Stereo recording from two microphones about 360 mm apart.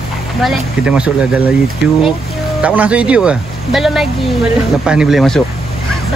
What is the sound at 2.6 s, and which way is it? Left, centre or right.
Speech, centre.